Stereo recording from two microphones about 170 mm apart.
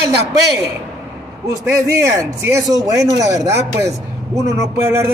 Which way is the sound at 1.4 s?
20° right (ahead or behind).